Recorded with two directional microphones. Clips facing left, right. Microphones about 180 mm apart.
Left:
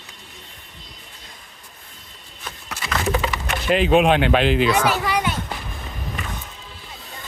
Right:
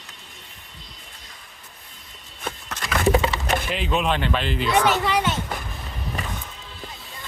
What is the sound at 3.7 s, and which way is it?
Speech, 65° left (ahead or behind).